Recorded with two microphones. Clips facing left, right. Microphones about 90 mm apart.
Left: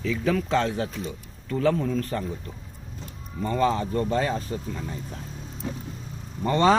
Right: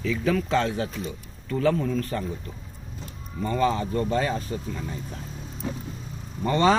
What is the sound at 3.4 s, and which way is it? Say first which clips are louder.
Speech: even; 35° left (ahead or behind).